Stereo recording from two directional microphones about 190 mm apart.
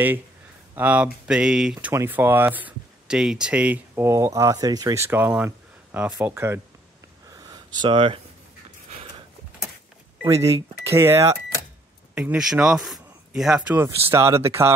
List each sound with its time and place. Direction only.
0.7 s speech: 5° right (ahead or behind)
7.2 s a sound: 20° right (ahead or behind)
10.2 s speech: 15° right (ahead or behind)